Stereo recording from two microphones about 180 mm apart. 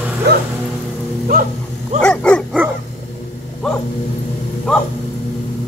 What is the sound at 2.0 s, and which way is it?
Dog, 5° left (ahead or behind).